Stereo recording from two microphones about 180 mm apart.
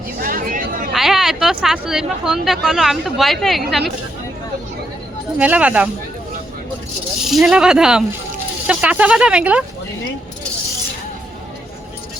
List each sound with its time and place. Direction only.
0.2 s a sound: 50° right (ahead or behind)
0.9 s speech: centre (ahead or behind)
5.4 s speech: 5° right (ahead or behind)
7.3 s speech: centre (ahead or behind)